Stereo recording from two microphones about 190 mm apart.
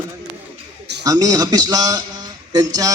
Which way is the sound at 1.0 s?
20° right (ahead or behind).